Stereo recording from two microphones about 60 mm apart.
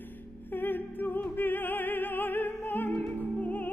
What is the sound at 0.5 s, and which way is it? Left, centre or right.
Music, left.